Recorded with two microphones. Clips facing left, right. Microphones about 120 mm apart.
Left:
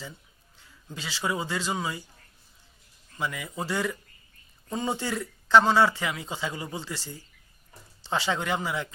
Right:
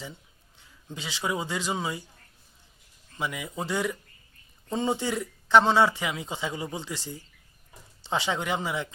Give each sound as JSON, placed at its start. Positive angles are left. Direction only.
{"t": 0.9, "sound": "speech", "side_deg": -20}
{"t": 3.2, "sound": "speech", "side_deg": -20}